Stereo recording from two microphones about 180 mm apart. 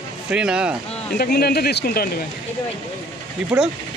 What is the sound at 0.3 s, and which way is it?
Speech, 5° right (ahead or behind).